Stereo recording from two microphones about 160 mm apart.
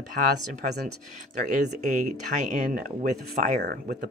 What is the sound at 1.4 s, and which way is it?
Speech, 50° right (ahead or behind).